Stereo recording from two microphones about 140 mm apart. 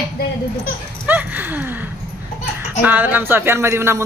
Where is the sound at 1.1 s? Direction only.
15° right (ahead or behind).